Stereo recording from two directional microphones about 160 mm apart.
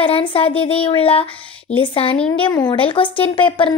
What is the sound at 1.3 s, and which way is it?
Speech, 10° left (ahead or behind).